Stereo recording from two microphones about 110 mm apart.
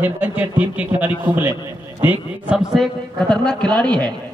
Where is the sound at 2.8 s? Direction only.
5° left (ahead or behind).